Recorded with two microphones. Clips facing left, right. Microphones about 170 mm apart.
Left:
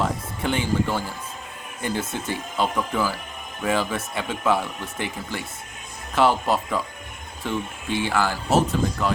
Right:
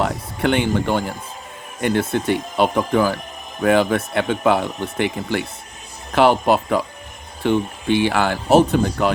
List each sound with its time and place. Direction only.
0.0 s speech: 70° right (ahead or behind)